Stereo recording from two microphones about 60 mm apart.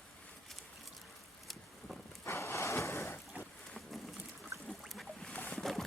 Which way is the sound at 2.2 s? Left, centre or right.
Left.